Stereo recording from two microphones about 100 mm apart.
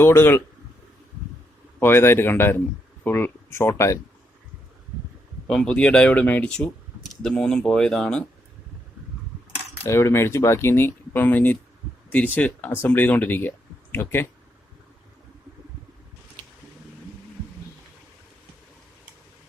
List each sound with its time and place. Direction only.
0.0 s speech: 25° left (ahead or behind)
1.8 s speech: 25° left (ahead or behind)
5.5 s speech: 10° left (ahead or behind)
7.1 s speech: 5° left (ahead or behind)
9.8 s speech: 30° left (ahead or behind)